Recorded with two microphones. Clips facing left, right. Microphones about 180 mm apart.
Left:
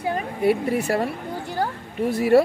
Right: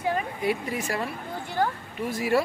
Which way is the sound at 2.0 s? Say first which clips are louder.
Left 8 dB; 60° left (ahead or behind).